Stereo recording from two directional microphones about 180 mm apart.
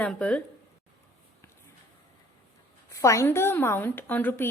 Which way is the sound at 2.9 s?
15° left (ahead or behind).